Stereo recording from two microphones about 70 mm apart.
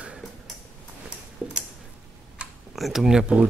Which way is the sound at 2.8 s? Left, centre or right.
Centre.